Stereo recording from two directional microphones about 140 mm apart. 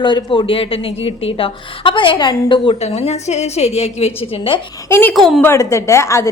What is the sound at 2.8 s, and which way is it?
A woman's voice, 50° left (ahead or behind).